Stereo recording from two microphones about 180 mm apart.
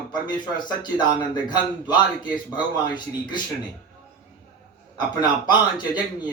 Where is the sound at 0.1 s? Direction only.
25° left (ahead or behind).